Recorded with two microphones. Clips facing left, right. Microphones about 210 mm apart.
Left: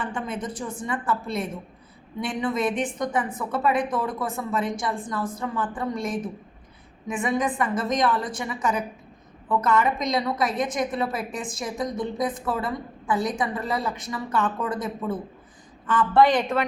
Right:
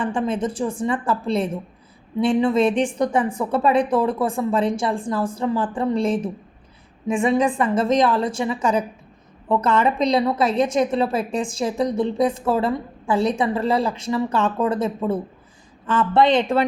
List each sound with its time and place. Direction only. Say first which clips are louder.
0.0 s a woman's voice: right 8 dB; 30° right (ahead or behind)